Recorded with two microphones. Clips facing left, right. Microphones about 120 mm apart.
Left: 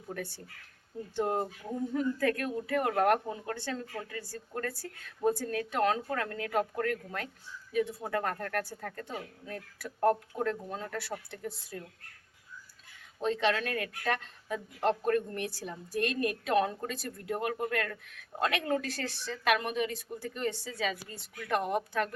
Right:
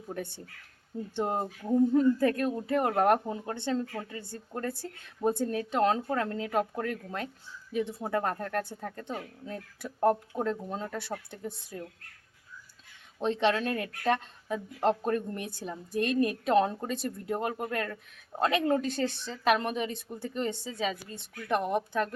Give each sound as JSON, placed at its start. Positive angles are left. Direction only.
{"t": 0.1, "sound": "speech", "side_deg": -20}
{"t": 13.1, "sound": "speech", "side_deg": -20}